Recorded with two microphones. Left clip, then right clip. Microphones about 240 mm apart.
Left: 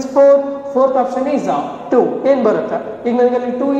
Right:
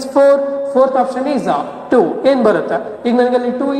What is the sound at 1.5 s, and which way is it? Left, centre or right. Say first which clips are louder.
A man's voice: right 1 dB; right.